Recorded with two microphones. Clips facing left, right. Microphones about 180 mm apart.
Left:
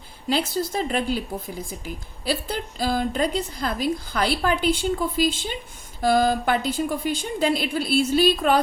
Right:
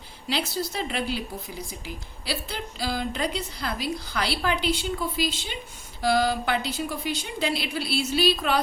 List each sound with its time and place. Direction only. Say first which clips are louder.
0.3 s a woman's voice: left 5 dB; 45° left (ahead or behind)